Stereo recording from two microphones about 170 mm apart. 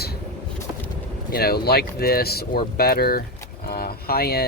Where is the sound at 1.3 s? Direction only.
65° left (ahead or behind).